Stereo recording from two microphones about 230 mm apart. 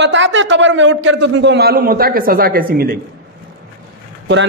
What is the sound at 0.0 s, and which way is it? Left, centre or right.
A man's voice, right.